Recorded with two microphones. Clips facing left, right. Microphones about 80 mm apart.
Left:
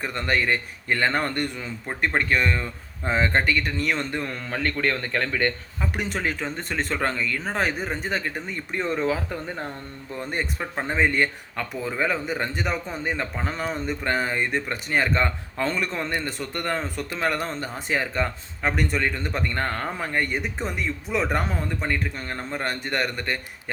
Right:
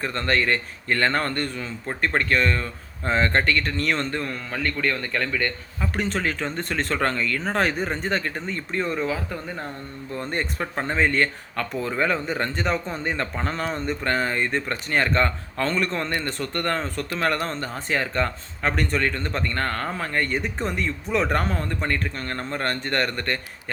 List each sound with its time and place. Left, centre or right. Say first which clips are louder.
0.0 s speech: right 1 dB; centre
4.5 s a man's voice: left 1 dB; left
5.8 s speech: right 2 dB; centre
10.2 s speech: right 1 dB; centre